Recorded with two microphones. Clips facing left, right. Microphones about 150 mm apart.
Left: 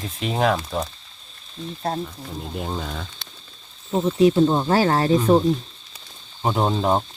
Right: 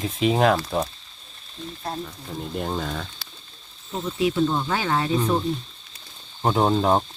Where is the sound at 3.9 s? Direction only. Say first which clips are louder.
Left 7 dB; 40° left (ahead or behind).